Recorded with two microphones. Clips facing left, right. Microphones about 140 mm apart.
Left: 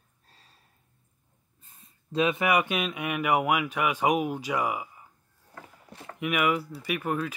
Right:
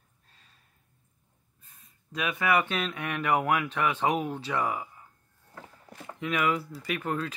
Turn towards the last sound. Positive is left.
turn(degrees=10)  # may be behind; listen again after turning